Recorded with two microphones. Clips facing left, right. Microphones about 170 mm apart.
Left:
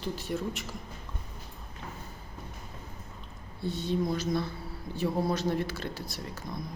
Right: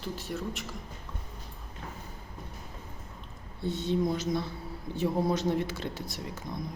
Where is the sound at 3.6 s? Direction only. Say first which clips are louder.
Right 1 dB; 20° right (ahead or behind).